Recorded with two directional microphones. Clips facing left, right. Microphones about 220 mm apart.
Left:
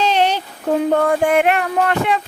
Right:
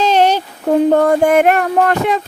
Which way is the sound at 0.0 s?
45° right (ahead or behind).